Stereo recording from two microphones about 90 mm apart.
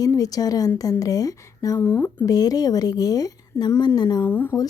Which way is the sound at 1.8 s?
25° left (ahead or behind).